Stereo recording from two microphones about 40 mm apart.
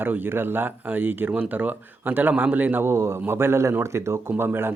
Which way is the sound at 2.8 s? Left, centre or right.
Right.